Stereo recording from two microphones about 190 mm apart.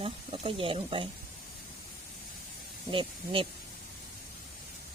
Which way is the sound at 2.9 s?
25° right (ahead or behind).